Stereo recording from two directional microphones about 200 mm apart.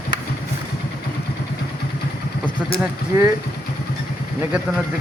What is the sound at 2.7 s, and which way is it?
Speech, 10° right (ahead or behind).